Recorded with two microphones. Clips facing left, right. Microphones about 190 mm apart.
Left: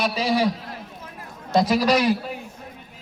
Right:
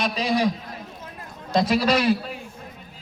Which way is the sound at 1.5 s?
15° left (ahead or behind).